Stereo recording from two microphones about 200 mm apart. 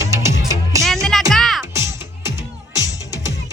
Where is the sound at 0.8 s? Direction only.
Centre (ahead or behind).